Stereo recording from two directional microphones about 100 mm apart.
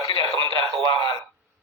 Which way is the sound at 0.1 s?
65° right (ahead or behind).